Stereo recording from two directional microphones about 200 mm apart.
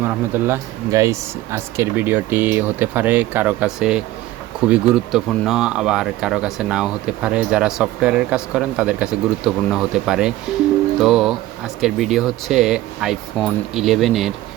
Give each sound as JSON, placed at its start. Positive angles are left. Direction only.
{"t": 0.0, "sound": "speech", "side_deg": -10}